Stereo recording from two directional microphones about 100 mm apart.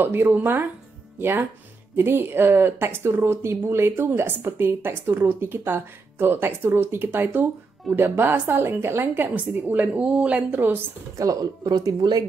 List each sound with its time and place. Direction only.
0.0 s speech: 20° right (ahead or behind)
11.1 s speech: 40° right (ahead or behind)